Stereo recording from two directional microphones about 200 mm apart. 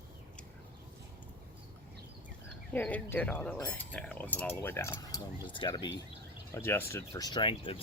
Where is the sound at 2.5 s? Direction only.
5° left (ahead or behind); by 5.9 s 25° left (ahead or behind).